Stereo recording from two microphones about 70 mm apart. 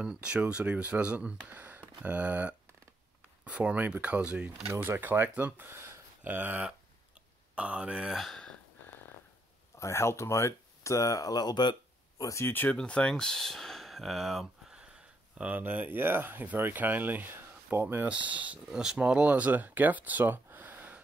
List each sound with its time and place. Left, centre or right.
0.0 s speech: centre
4.7 s speech: right
8.2 s speech: centre
9.8 s speech: left
12.2 s speech: left
12.6 s speech: centre
15.3 s speech: right
18.0 s speech: centre
18.7 s speech: centre; by 21.0 s right